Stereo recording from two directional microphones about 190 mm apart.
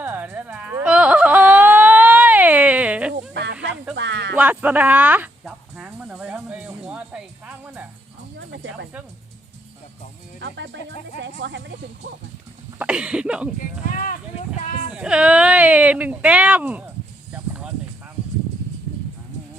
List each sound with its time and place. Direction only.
0.0 s whimper: 10° right (ahead or behind)
3.3 s snake: 65° right (ahead or behind)
3.9 s a sound: 70° right (ahead or behind)
4.4 s music: 10° right (ahead or behind)
10.4 s speech: 65° right (ahead or behind)
12.8 s cough: 5° right (ahead or behind)
14.9 s speech: 5° right (ahead or behind)
17.3 s a sound: 5° right (ahead or behind)